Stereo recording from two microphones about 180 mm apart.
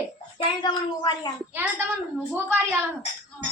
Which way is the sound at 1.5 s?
10° right (ahead or behind).